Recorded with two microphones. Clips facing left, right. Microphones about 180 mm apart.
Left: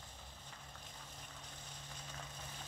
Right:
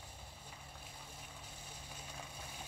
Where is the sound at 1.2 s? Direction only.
10° right (ahead or behind).